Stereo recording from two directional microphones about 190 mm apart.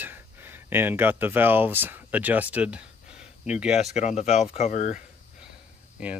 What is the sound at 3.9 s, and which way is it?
Speech, 35° left (ahead or behind).